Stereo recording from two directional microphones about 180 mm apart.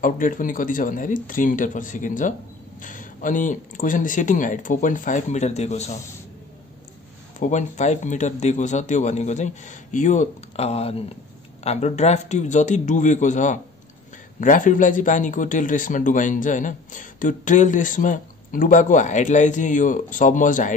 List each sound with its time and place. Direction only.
0.0 s speech: 50° left (ahead or behind)
7.3 s speech: 45° left (ahead or behind)